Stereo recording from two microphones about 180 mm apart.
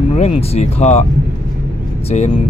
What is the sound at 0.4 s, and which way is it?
Speech, 35° left (ahead or behind).